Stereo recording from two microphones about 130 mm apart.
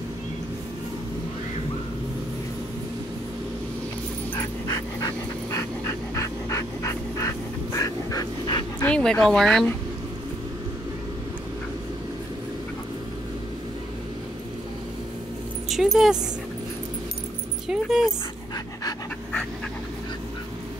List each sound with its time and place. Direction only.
4.6 s dog: 25° left (ahead or behind)
8.8 s speech: 5° left (ahead or behind)
15.7 s dog: centre (ahead or behind)
17.6 s speech: 5° right (ahead or behind)